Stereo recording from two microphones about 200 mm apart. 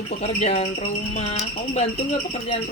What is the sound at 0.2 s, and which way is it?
Speech, 30° left (ahead or behind).